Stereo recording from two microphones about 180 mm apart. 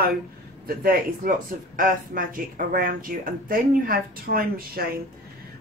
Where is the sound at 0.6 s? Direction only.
55° right (ahead or behind).